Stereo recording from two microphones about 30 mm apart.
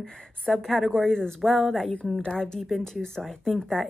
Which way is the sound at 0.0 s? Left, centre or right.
Left.